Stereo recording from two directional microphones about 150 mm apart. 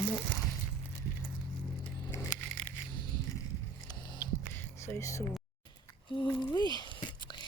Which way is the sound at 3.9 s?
25° left (ahead or behind).